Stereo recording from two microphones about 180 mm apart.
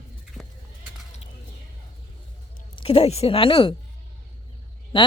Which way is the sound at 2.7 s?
30° left (ahead or behind).